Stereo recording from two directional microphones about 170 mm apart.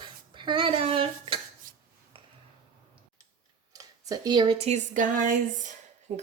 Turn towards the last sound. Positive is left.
turn(degrees=-45)  # may be behind; listen again after turning